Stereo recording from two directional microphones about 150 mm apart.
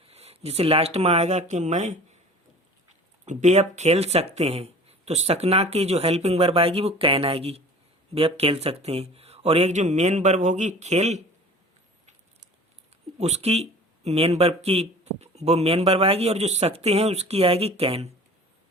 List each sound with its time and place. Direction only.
0.1 s speech: 45° right (ahead or behind)
3.2 s speech: 50° right (ahead or behind)
13.1 s speech: 45° right (ahead or behind)